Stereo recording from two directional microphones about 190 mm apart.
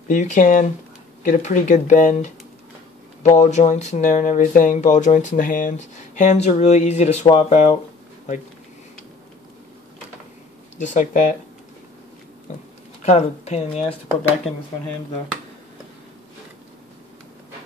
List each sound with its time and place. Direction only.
0.1 s speech: 40° left (ahead or behind)
10.8 s speech: 40° left (ahead or behind)
13.0 s speech: 35° left (ahead or behind)